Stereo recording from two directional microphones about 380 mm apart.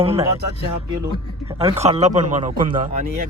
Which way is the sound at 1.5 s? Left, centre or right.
Centre.